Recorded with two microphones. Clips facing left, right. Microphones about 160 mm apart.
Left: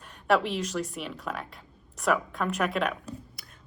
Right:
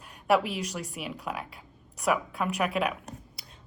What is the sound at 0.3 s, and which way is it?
A woman's voice, 10° right (ahead or behind).